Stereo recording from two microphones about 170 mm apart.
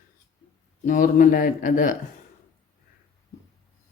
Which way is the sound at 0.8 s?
50° left (ahead or behind).